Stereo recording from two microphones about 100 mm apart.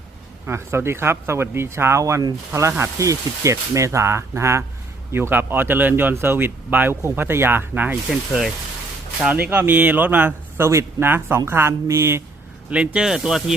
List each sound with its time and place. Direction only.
0.4 s speech: 25° right (ahead or behind)
9.2 s speech: 15° right (ahead or behind)
12.7 s speech: 10° right (ahead or behind)